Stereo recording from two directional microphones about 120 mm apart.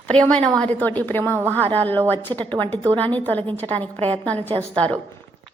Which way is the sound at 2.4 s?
45° right (ahead or behind).